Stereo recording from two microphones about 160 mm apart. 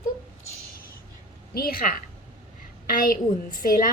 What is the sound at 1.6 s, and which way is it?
A woman's voice, 65° left (ahead or behind).